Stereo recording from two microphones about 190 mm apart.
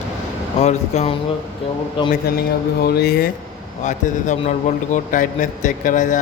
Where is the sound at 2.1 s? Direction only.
55° left (ahead or behind).